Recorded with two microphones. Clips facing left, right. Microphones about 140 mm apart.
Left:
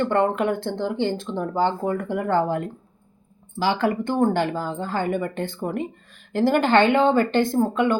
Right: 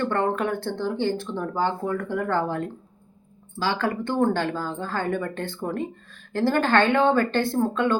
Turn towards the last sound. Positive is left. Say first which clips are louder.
# left 2 dB
turn(degrees=15)  # may be behind; listen again after turning